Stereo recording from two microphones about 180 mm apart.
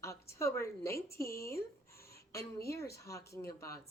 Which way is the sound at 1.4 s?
15° left (ahead or behind).